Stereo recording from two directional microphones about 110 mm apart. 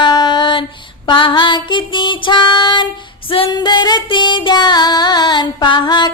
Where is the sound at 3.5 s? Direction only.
40° left (ahead or behind).